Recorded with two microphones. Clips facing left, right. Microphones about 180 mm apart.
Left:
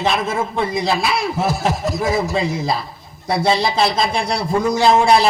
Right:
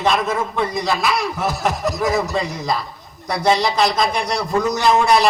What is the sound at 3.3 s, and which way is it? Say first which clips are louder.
Speech: even; 25° left (ahead or behind).